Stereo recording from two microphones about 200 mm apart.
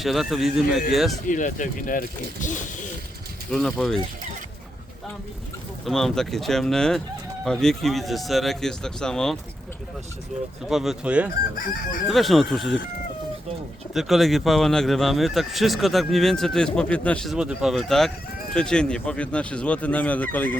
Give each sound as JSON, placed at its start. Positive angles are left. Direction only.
{"t": 0.0, "sound": "speech", "side_deg": 0}
{"t": 1.3, "sound": "speech", "side_deg": 40}
{"t": 3.5, "sound": "speech", "side_deg": 0}
{"t": 5.8, "sound": "speech", "side_deg": 0}
{"t": 10.7, "sound": "speech", "side_deg": 0}
{"t": 11.5, "sound": "chicken", "side_deg": 40}
{"t": 12.0, "sound": "speech", "side_deg": 0}
{"t": 13.9, "sound": "speech", "side_deg": 0}